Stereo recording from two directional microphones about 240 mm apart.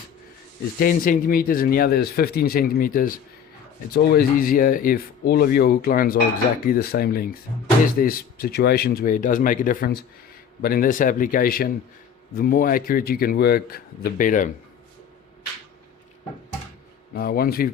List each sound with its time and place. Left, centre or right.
0.8 s speech: left
17.2 s speech: left